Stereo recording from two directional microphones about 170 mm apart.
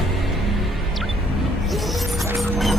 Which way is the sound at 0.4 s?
Centre (ahead or behind).